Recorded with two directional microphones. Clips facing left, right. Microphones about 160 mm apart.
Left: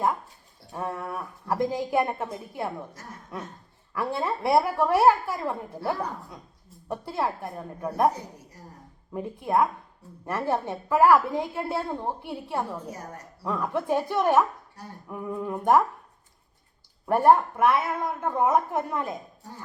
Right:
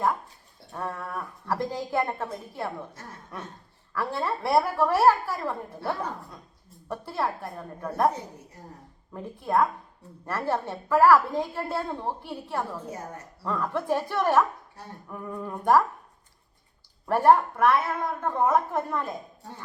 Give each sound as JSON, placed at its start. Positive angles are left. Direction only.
{"t": 0.7, "sound": "a woman's voice", "side_deg": 15}
{"t": 3.9, "sound": "a woman's voice", "side_deg": 15}
{"t": 9.1, "sound": "a woman's voice", "side_deg": 15}
{"t": 17.2, "sound": "a woman's voice", "side_deg": 20}